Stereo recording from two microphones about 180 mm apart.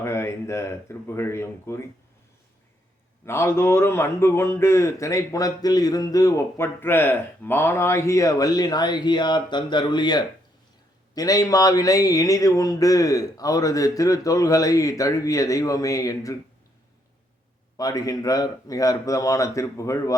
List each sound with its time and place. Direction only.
0.0 s speech: 15° left (ahead or behind)
3.2 s speech: 15° left (ahead or behind)
17.7 s speech: 20° left (ahead or behind)